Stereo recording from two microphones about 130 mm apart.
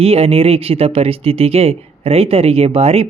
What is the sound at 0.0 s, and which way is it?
Speech, 50° right (ahead or behind).